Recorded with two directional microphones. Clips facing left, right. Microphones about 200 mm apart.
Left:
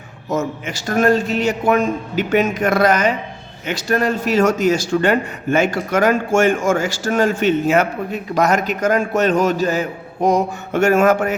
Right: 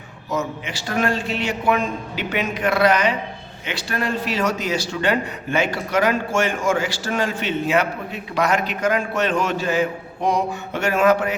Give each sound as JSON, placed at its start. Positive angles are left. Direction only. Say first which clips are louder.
{"t": 0.3, "sound": "a man's voice", "louder": "left 4 dB", "side_deg": 45}